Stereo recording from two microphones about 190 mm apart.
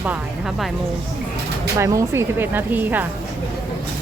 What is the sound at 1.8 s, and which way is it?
Speech, 15° right (ahead or behind).